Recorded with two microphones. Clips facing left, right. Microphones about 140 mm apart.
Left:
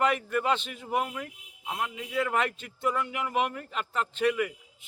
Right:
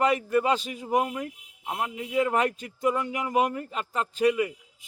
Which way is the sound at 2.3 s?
40° right (ahead or behind).